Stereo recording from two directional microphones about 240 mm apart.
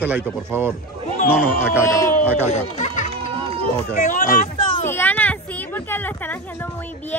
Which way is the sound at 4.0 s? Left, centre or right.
Left.